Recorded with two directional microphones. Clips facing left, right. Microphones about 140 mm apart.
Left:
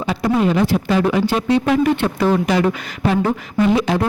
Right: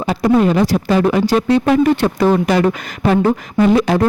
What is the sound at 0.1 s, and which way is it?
Speech, 45° right (ahead or behind).